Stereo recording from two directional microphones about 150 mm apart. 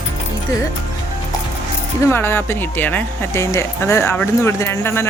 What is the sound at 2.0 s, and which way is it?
Speech, 15° left (ahead or behind).